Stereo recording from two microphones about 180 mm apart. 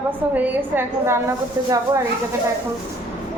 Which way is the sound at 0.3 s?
10° right (ahead or behind).